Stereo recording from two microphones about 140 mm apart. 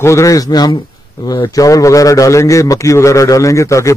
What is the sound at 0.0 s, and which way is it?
A man's voice, 20° left (ahead or behind).